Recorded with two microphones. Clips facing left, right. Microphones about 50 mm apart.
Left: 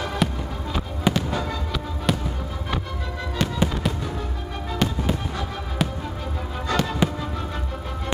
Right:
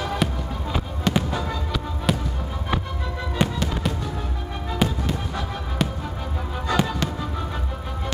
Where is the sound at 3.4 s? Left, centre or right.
Centre.